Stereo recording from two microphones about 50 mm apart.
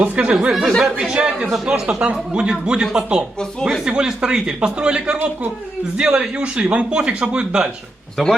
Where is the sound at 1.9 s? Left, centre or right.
Right.